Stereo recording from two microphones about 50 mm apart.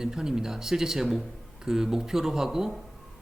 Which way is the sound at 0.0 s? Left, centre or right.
Centre.